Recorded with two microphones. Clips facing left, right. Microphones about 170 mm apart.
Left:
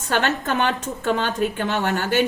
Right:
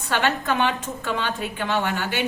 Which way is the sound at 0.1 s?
45° left (ahead or behind).